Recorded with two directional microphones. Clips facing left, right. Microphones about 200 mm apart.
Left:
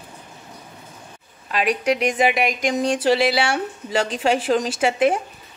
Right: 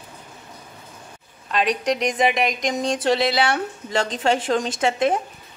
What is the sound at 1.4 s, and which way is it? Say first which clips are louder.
A woman's voice: left 1 dB; 5° left (ahead or behind).